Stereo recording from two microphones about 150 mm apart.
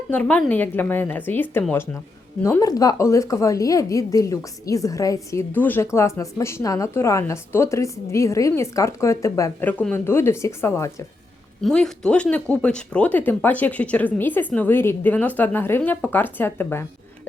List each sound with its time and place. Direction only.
0.1 s a woman's voice: 10° left (ahead or behind)
11.6 s speech: 5° left (ahead or behind)